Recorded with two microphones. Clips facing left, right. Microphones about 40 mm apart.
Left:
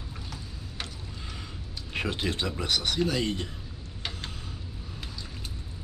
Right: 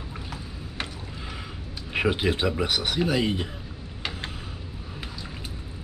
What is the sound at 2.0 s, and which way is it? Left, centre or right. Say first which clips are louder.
Speech: right 6 dB; centre.